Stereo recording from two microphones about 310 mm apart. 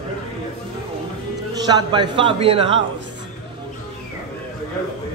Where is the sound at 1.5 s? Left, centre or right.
Centre.